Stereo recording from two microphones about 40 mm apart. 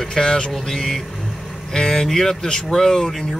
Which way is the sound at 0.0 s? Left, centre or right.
Centre.